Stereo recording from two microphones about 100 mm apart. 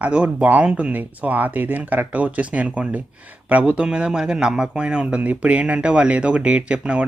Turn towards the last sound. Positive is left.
turn(degrees=-10)  # may be behind; listen again after turning